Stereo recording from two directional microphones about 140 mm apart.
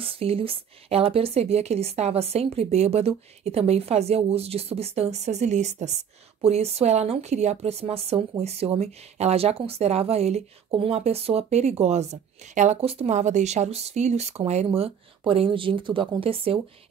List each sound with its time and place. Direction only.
0.0 s speech: 45° right (ahead or behind)